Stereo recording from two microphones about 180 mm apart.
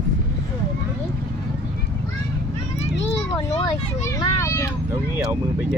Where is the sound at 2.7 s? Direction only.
35° left (ahead or behind).